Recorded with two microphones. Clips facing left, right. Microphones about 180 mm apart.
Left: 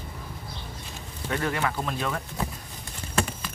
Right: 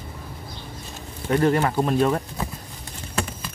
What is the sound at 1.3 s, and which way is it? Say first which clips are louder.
Speech: right 8 dB; 40° right (ahead or behind).